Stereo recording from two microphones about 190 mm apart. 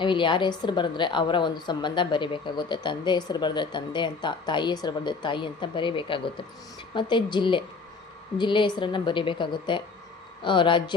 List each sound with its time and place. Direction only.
0.0 s a woman's voice: 25° left (ahead or behind)